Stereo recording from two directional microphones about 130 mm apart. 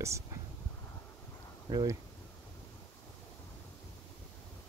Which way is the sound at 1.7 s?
30° right (ahead or behind).